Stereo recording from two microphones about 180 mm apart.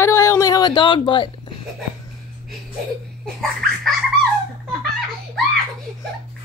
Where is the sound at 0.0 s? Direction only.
15° left (ahead or behind).